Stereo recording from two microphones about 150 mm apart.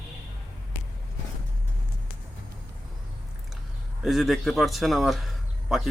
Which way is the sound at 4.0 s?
Centre (ahead or behind).